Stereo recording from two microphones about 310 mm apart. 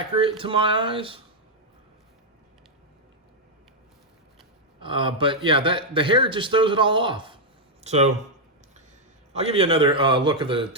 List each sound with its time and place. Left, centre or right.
0.0 s a man's voice: centre
4.8 s a man's voice: centre
9.3 s a man's voice: centre